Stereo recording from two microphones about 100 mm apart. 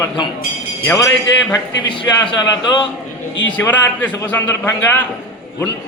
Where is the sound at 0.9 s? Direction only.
35° left (ahead or behind).